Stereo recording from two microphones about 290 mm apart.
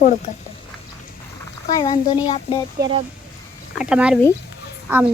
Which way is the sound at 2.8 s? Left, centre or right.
Centre.